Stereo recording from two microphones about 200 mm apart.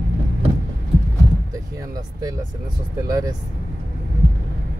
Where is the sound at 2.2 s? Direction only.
20° right (ahead or behind).